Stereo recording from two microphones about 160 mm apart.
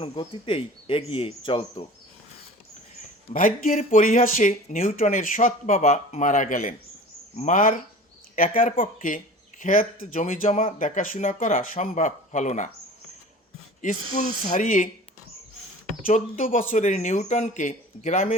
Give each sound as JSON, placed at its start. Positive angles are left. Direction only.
{"t": 0.0, "sound": "speech", "side_deg": 35}
{"t": 3.3, "sound": "speech", "side_deg": 55}
{"t": 14.4, "sound": "speech", "side_deg": 55}
{"t": 16.0, "sound": "speech", "side_deg": 60}